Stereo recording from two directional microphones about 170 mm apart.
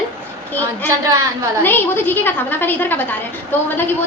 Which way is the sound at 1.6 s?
10° left (ahead or behind).